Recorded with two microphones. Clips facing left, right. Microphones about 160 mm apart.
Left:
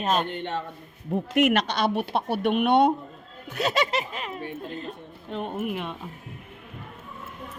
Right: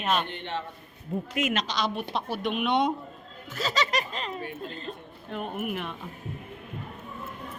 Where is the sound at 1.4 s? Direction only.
65° left (ahead or behind).